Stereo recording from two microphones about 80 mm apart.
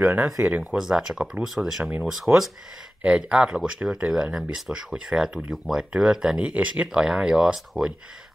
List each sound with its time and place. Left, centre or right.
0.2 s speech: centre
0.7 s speech: centre
3.0 s speech: centre